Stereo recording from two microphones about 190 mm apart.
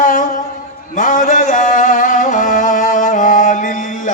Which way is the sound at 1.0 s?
45° left (ahead or behind).